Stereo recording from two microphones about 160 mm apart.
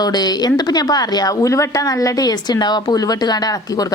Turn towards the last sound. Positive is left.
turn(degrees=25)  # may be behind; listen again after turning